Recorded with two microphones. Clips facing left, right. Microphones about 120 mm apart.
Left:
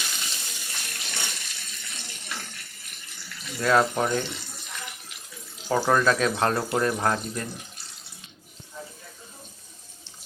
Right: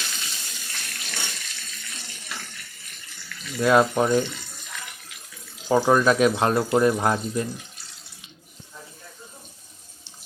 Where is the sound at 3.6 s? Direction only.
15° right (ahead or behind).